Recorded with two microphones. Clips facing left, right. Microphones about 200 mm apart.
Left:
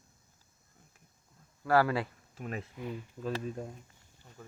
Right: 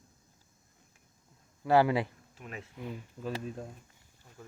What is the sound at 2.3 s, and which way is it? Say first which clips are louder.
Speech: left 5 dB; 40° left (ahead or behind).